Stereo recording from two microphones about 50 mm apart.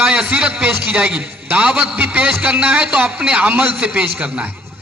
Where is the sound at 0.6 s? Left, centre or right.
Right.